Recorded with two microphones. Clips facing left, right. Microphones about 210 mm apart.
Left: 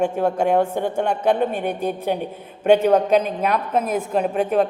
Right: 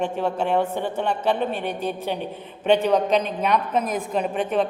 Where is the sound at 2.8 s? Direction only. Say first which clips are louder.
Left 4 dB; 50° left (ahead or behind).